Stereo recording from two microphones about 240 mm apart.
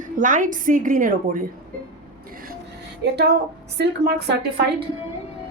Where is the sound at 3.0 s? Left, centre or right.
Right.